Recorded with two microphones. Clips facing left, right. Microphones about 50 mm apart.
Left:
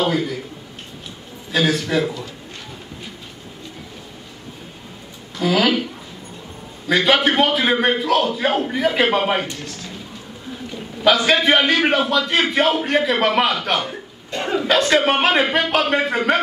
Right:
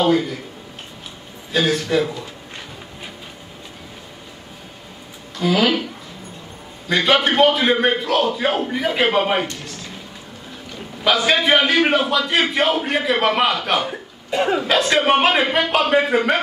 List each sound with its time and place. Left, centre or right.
1.5 s a man's voice: centre
5.4 s a man's voice: centre
6.9 s a man's voice: centre
11.1 s a man's voice: centre